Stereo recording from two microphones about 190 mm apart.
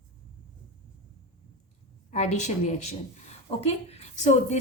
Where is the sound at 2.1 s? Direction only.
35° left (ahead or behind).